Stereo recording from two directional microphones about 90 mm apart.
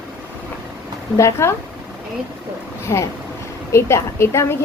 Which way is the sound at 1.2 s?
30° left (ahead or behind).